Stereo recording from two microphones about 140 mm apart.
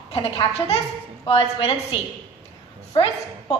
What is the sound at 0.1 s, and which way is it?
A woman's voice, 45° left (ahead or behind).